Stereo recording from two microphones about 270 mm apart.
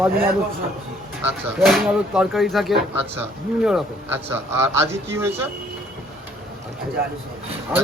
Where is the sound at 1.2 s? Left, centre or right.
Centre.